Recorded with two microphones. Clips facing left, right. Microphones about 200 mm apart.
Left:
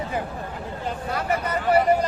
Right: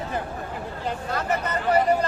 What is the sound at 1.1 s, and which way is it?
Vehicle, 10° left (ahead or behind).